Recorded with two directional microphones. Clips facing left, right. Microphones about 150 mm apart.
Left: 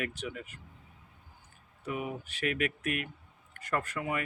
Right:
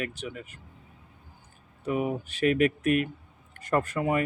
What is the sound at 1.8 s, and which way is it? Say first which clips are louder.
A man's voice: right 8 dB; 30° right (ahead or behind).